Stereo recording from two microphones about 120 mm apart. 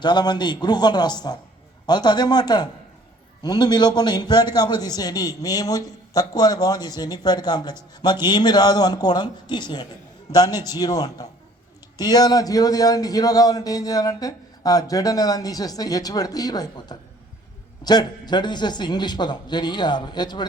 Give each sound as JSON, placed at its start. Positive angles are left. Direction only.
{"t": 0.0, "sound": "speech", "side_deg": 40}